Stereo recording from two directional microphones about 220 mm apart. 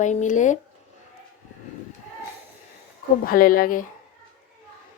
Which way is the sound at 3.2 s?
40° left (ahead or behind).